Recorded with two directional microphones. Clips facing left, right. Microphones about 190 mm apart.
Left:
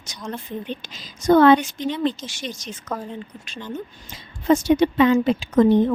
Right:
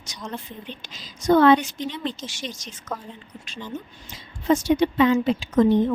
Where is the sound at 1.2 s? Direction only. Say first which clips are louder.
Left 2 dB; 50° left (ahead or behind).